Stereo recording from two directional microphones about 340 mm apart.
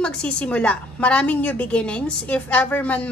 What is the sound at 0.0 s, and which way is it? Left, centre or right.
A woman's voice, centre.